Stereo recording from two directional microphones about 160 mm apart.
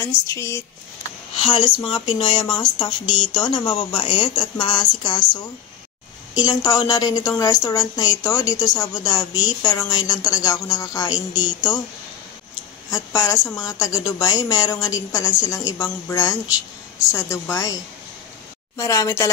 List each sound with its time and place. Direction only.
0.0 s a woman's voice: 20° left (ahead or behind)
1.3 s a woman's voice: 30° left (ahead or behind)
12.9 s a woman's voice: 20° left (ahead or behind)
18.8 s a woman's voice: 20° left (ahead or behind)